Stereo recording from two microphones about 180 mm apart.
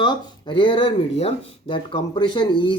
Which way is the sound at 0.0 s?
25° left (ahead or behind).